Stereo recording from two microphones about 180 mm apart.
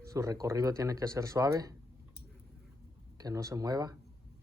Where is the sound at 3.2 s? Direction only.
20° right (ahead or behind).